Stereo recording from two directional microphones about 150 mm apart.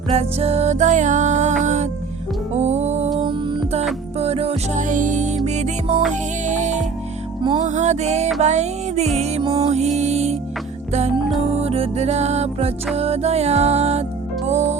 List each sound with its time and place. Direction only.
0.1 s music: 45° right (ahead or behind)
3.2 s music: 35° right (ahead or behind)
4.8 s music: 60° right (ahead or behind)
11.5 s music: 45° right (ahead or behind)